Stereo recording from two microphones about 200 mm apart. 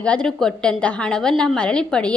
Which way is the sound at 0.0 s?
5° left (ahead or behind).